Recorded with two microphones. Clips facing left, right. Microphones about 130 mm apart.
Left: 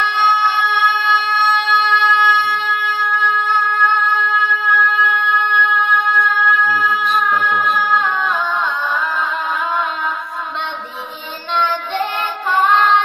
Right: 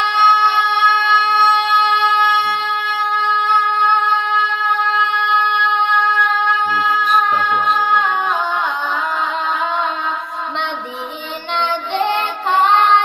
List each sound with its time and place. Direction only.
0.0 s a sound: 25° right (ahead or behind)
1.3 s music: 25° right (ahead or behind)
11.5 s child singing: 20° right (ahead or behind)